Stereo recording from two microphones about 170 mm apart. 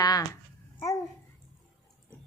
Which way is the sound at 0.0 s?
20° left (ahead or behind).